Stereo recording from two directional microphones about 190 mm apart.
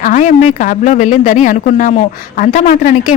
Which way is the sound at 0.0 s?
40° left (ahead or behind).